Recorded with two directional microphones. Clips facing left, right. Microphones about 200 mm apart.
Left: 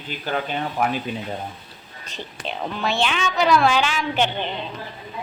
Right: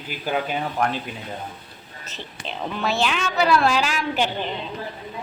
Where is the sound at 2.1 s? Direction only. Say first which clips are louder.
Left 3 dB; centre (ahead or behind).